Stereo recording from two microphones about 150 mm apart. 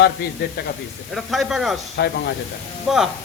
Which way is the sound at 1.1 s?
Centre (ahead or behind).